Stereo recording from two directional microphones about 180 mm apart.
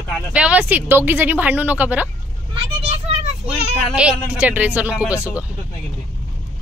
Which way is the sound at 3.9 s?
5° right (ahead or behind).